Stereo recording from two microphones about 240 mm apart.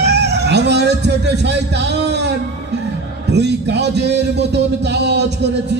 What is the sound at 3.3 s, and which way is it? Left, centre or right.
A man's voice, right.